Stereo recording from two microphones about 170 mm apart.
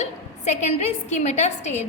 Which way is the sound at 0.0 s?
40° left (ahead or behind).